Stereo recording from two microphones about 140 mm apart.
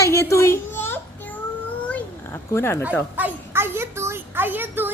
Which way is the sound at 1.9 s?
15° left (ahead or behind).